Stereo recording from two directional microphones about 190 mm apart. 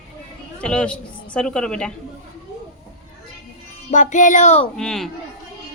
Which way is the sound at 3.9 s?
40° left (ahead or behind).